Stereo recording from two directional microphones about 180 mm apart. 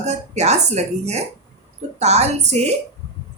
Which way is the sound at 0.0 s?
40° right (ahead or behind).